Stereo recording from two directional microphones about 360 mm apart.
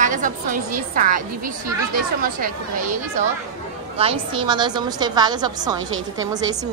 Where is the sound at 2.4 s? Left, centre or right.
Right.